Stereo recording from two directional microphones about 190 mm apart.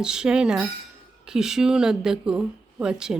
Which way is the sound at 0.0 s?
5° right (ahead or behind).